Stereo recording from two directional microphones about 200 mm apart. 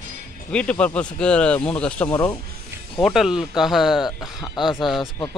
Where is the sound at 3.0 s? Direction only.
Centre (ahead or behind).